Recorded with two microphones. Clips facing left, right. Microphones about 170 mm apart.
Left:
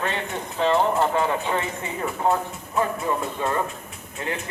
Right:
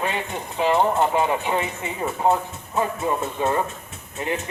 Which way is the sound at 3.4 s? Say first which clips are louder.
Right 5 dB; 20° right (ahead or behind).